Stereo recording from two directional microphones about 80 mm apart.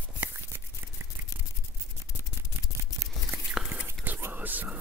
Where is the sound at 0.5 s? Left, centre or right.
Right.